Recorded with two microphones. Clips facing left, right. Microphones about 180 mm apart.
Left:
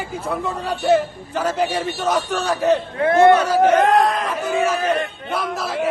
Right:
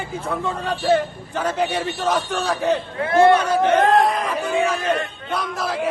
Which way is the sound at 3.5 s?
5° left (ahead or behind).